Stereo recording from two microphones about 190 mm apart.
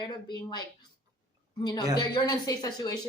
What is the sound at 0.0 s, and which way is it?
Speech, 25° left (ahead or behind).